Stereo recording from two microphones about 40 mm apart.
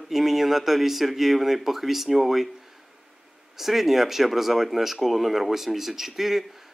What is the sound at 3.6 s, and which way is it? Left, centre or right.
Speech, centre.